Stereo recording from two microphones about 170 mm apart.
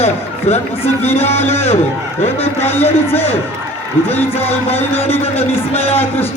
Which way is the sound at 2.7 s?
15° left (ahead or behind).